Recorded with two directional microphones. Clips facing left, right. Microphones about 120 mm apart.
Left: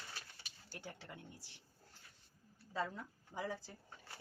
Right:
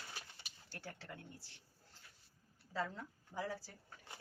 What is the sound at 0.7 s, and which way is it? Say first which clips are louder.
Speech: even; 15° left (ahead or behind).